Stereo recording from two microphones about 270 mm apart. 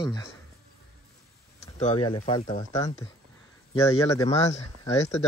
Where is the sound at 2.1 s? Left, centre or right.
Left.